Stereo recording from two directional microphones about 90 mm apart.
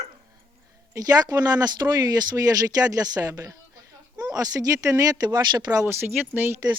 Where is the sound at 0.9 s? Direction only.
40° right (ahead or behind).